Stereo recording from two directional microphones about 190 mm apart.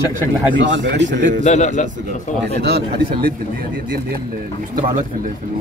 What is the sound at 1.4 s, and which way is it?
Speech, 40° left (ahead or behind).